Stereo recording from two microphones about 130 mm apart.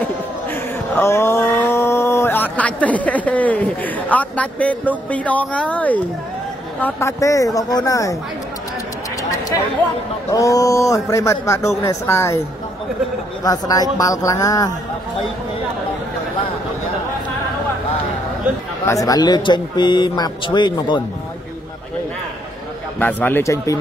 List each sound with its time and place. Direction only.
0.0 s a sound: 15° left (ahead or behind)
6.8 s a man's voice: 20° left (ahead or behind)
10.3 s a man's voice: 25° left (ahead or behind)
13.4 s a man's voice: 30° left (ahead or behind)
18.9 s speech: 25° left (ahead or behind)
22.9 s speech: 15° left (ahead or behind)